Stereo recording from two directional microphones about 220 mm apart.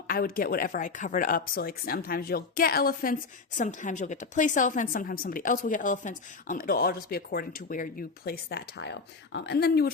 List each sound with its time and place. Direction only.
0.1 s speech: 40° left (ahead or behind)